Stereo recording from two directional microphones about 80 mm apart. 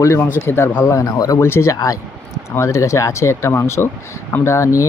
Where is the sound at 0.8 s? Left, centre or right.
Left.